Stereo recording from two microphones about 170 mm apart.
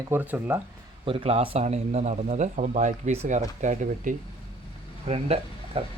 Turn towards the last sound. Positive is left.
turn(degrees=-35)  # may be behind; listen again after turning